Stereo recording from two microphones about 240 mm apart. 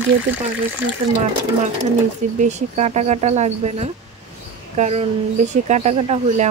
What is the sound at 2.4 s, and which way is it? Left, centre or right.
Speech, right.